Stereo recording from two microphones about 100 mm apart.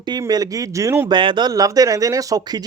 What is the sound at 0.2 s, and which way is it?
Speech, 40° right (ahead or behind).